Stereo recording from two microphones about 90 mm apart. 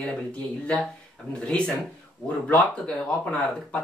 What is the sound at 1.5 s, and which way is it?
Speech, 10° left (ahead or behind).